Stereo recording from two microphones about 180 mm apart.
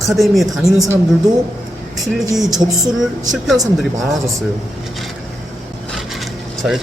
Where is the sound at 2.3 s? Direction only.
Centre (ahead or behind).